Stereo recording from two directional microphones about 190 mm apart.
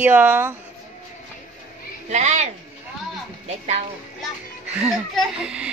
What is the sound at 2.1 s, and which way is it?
Speech, 35° right (ahead or behind).